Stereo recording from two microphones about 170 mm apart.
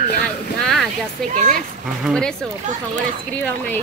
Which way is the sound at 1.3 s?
50° right (ahead or behind).